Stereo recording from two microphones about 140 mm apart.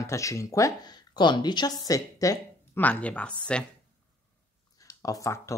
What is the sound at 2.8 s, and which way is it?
Speech, 10° left (ahead or behind).